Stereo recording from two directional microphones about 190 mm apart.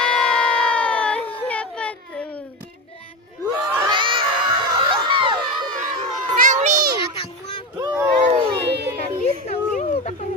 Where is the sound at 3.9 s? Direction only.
25° right (ahead or behind).